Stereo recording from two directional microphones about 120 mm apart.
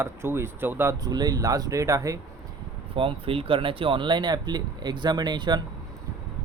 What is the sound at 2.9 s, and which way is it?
Speech, 50° right (ahead or behind).